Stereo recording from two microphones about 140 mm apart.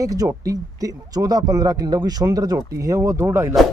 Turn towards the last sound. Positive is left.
turn(degrees=-20)  # may be behind; listen again after turning